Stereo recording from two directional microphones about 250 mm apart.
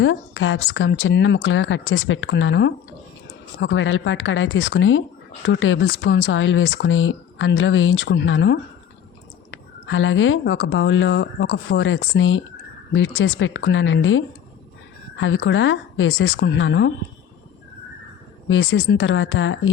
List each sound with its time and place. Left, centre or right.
0.0 s a woman's voice: left
18.4 s a woman's voice: left